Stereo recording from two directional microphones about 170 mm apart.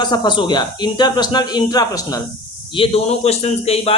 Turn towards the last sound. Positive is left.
turn(degrees=35)  # may be behind; listen again after turning